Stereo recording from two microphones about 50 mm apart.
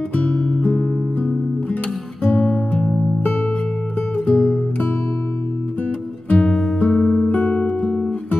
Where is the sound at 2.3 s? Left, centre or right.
Centre.